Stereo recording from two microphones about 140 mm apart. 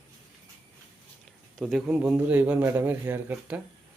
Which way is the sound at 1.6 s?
5° right (ahead or behind).